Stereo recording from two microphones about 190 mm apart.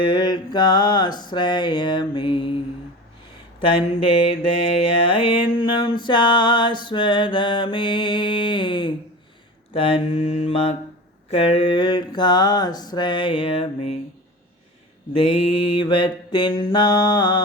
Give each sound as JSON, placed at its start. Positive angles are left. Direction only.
{"t": 0.0, "sound": "mantra", "side_deg": 25}
{"t": 3.8, "sound": "mantra", "side_deg": 30}
{"t": 5.5, "sound": "mantra", "side_deg": 25}
{"t": 15.1, "sound": "mantra", "side_deg": 30}